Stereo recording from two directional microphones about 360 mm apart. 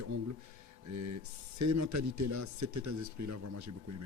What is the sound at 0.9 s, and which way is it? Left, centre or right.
Speech, right.